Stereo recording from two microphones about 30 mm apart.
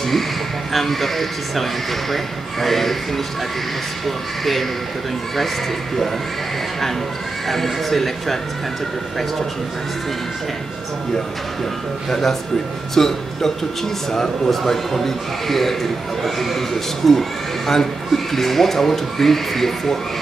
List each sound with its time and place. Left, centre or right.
0.7 s a man's voice: centre
4.0 s a man's voice: centre
7.4 s a man's voice: centre
12.1 s speech: centre